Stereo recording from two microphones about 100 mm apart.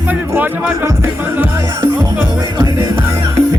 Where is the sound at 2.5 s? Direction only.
40° right (ahead or behind).